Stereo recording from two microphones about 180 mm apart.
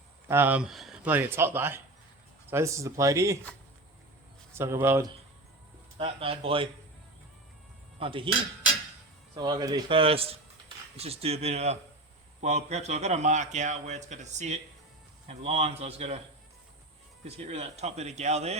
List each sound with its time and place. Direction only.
0.3 s speech: 10° right (ahead or behind)
4.5 s speech: 15° right (ahead or behind)
6.0 s a man's voice: 30° right (ahead or behind)
7.9 s speech: 30° right (ahead or behind)
9.3 s a man's voice: 25° right (ahead or behind)
17.2 s a man's voice: 35° right (ahead or behind)